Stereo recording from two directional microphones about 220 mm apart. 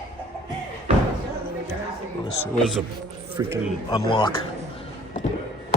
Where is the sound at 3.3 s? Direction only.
10° right (ahead or behind).